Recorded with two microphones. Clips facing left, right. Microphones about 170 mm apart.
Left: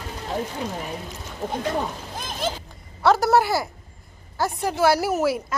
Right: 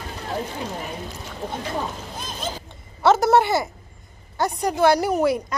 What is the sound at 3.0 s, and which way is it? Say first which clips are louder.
A woman's voice: right 2 dB; centre (ahead or behind).